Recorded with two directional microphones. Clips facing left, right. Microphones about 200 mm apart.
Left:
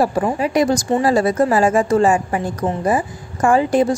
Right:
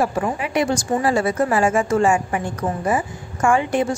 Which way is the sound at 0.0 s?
35° left (ahead or behind).